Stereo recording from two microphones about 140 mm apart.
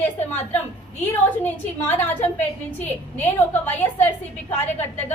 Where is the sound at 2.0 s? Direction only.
15° left (ahead or behind).